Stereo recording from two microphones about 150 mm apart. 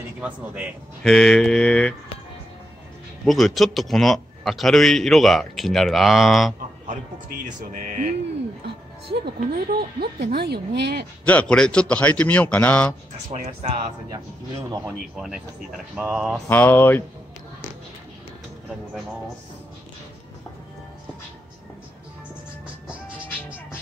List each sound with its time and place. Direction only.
0.2 s speech: 10° right (ahead or behind)
1.0 s a man's voice: 5° left (ahead or behind)
3.3 s a man's voice: centre (ahead or behind)
9.2 s speech: 90° right
11.2 s a man's voice: 10° left (ahead or behind)
13.3 s speech: 40° right (ahead or behind)
15.1 s a man's voice: 5° right (ahead or behind)
16.4 s a man's voice: 10° left (ahead or behind)